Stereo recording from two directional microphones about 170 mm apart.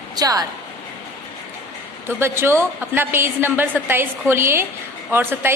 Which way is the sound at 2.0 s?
15° right (ahead or behind).